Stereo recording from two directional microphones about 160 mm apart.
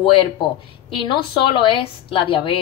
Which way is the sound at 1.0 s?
30° left (ahead or behind).